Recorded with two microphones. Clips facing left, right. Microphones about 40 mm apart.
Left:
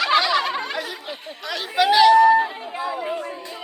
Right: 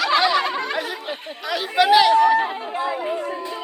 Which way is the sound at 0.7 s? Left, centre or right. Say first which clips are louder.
Right 3 dB; centre.